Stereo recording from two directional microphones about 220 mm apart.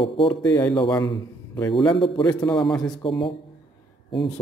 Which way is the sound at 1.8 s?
20° left (ahead or behind).